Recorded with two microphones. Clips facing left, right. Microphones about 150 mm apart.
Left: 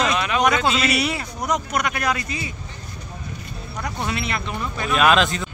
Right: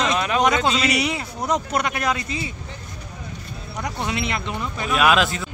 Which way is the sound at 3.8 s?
20° right (ahead or behind).